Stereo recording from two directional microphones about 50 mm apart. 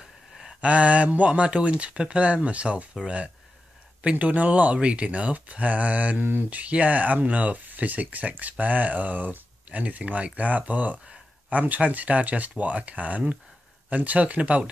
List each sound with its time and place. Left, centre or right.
0.6 s speech: right